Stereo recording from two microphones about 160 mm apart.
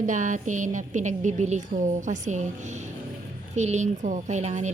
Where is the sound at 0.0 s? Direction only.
50° right (ahead or behind).